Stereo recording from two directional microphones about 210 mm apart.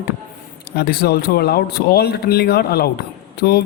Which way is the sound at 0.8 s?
50° left (ahead or behind).